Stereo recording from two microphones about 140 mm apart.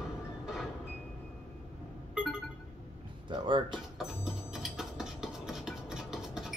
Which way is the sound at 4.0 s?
5° right (ahead or behind).